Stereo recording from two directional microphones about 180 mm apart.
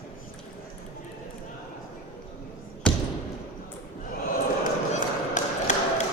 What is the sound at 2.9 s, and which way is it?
Basketball bounce, 5° left (ahead or behind).